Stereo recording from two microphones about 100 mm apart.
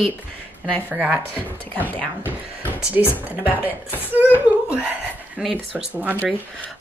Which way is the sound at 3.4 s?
20° right (ahead or behind).